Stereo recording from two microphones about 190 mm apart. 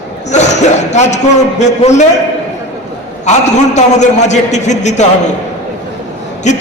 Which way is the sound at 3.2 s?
40° left (ahead or behind).